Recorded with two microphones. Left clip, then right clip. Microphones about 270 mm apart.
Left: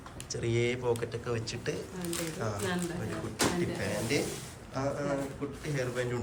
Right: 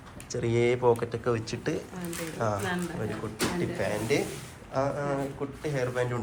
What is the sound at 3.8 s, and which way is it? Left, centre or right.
Speech, centre.